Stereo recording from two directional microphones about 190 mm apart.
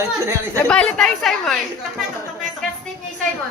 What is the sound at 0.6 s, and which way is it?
Speech, 5° left (ahead or behind).